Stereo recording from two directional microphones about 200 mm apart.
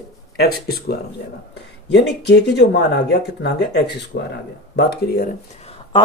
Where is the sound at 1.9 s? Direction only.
55° left (ahead or behind).